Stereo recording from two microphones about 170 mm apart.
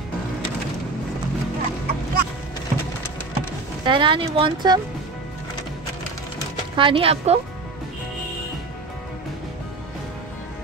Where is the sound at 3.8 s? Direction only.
30° right (ahead or behind).